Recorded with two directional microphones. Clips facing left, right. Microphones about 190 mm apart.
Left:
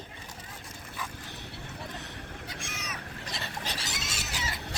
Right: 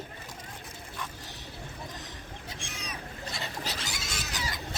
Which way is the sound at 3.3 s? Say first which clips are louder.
Even; centre (ahead or behind).